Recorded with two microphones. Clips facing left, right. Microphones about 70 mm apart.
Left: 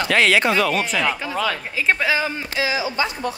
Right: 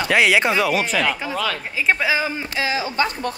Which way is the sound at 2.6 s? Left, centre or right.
Right.